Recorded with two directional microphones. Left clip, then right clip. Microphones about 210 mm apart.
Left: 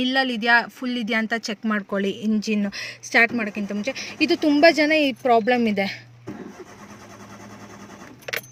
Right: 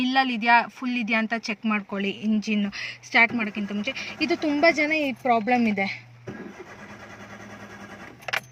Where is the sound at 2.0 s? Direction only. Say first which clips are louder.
Left 3 dB; 20° left (ahead or behind).